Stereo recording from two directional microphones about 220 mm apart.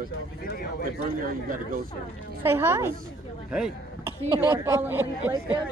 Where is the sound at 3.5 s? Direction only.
5° right (ahead or behind).